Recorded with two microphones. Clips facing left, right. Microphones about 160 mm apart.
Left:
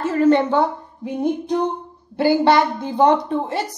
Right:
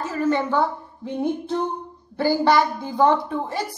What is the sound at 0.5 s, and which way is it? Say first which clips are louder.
A woman's voice: left 3 dB; 20° left (ahead or behind).